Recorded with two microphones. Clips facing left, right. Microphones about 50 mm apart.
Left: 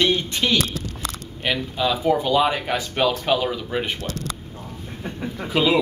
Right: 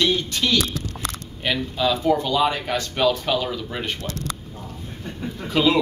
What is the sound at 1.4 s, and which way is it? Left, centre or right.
Speech, centre.